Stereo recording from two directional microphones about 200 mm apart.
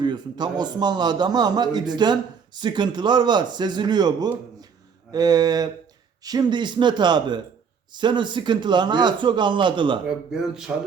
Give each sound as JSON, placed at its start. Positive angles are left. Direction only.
{"t": 0.0, "sound": "a man's voice", "side_deg": -20}
{"t": 10.1, "sound": "speech", "side_deg": -5}